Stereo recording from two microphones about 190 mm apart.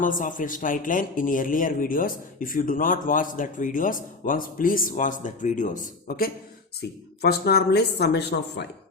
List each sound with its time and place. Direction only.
0.0 s a man's voice: 45° left (ahead or behind); by 8.6 s 60° left (ahead or behind)